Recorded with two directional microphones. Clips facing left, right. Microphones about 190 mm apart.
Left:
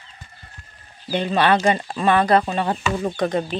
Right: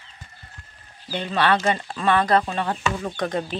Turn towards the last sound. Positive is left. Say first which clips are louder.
# left 4 dB
turn(degrees=5)  # may be behind; listen again after turning